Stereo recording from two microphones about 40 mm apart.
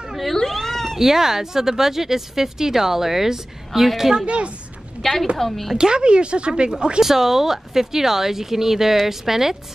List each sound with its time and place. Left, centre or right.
0.5 s cat: centre
0.9 s speech: centre
5.0 s a woman's voice: centre
5.8 s speech: right
7.0 s speech: centre